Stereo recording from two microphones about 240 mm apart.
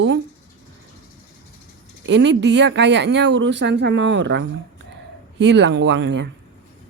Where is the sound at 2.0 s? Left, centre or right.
Right.